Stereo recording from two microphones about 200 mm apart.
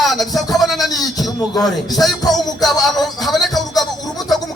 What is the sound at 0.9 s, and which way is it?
Speech, 20° left (ahead or behind).